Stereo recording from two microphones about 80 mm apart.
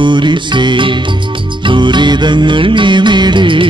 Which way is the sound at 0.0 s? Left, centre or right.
Right.